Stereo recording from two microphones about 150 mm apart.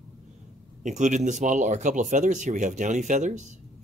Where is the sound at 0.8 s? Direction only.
55° right (ahead or behind).